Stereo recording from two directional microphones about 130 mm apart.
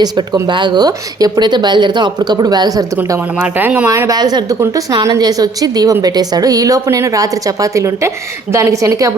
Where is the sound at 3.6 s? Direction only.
10° right (ahead or behind).